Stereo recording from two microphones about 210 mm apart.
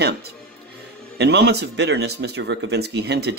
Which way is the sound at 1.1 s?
50° right (ahead or behind).